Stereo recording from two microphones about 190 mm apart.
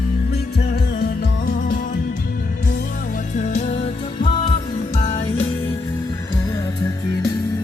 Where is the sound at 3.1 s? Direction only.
40° left (ahead or behind).